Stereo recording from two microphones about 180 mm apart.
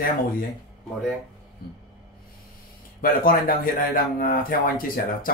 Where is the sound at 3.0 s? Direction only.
55° left (ahead or behind).